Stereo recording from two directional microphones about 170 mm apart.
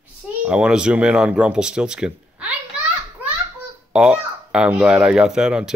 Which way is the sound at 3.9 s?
5° right (ahead or behind).